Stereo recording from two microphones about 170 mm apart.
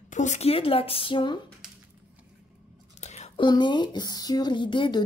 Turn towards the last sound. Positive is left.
turn(degrees=30)  # may be behind; listen again after turning